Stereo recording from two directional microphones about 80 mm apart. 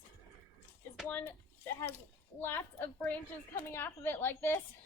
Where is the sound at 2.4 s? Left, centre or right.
Left.